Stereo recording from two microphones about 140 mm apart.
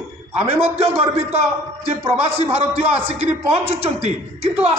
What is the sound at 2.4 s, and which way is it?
A man's voice, 45° right (ahead or behind).